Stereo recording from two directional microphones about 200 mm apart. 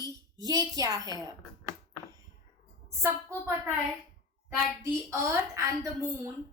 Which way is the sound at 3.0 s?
15° right (ahead or behind).